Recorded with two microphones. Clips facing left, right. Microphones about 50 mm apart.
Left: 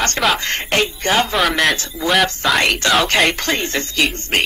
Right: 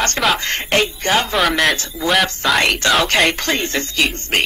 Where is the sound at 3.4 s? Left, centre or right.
Right.